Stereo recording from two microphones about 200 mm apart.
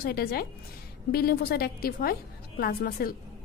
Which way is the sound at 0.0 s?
50° left (ahead or behind).